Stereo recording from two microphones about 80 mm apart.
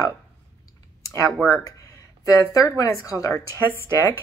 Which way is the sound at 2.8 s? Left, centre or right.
Left.